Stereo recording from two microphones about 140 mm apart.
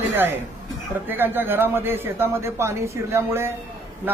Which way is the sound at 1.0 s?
15° right (ahead or behind).